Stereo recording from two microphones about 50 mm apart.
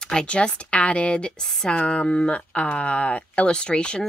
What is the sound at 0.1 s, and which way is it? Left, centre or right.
Speech, centre.